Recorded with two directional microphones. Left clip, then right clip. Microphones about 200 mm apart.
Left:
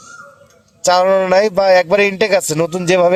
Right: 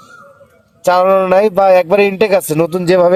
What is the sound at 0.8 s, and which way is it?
A man's voice, 35° right (ahead or behind).